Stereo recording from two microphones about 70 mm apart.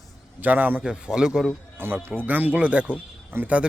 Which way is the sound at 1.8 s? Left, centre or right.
Right.